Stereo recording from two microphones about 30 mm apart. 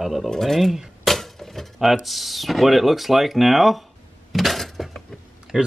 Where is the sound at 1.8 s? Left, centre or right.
Centre.